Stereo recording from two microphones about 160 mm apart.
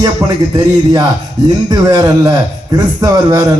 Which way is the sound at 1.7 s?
25° right (ahead or behind).